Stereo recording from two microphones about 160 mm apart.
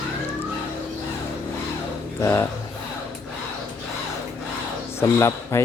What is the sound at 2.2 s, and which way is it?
Speech, 20° left (ahead or behind).